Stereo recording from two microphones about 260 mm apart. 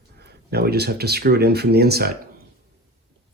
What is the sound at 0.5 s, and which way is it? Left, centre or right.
Speech, right.